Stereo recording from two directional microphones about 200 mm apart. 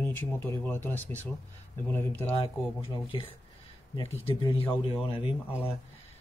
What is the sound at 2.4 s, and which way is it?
Speech, 25° left (ahead or behind).